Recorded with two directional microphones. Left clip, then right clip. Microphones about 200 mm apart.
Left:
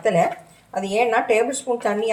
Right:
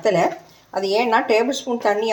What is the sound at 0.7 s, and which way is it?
Speech, 20° right (ahead or behind).